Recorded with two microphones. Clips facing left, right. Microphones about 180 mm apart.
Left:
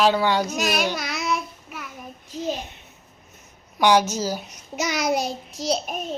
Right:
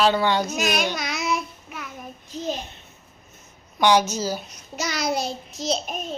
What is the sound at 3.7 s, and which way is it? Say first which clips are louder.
A child's voice: even; 10° left (ahead or behind).